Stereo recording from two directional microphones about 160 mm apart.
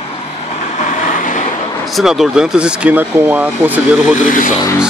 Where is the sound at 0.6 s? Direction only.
50° left (ahead or behind).